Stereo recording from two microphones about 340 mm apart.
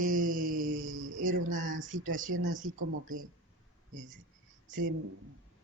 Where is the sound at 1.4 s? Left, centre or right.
Right.